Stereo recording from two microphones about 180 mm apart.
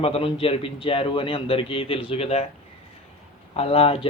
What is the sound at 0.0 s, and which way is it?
A man's voice, 30° left (ahead or behind).